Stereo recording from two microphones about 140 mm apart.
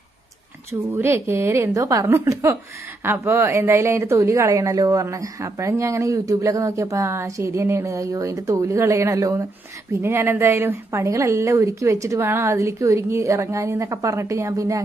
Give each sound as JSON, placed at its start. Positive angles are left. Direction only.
{"t": 0.7, "sound": "a woman's voice", "side_deg": -20}